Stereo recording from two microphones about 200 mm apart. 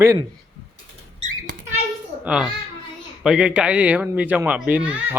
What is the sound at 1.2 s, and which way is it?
Rodents, 45° right (ahead or behind).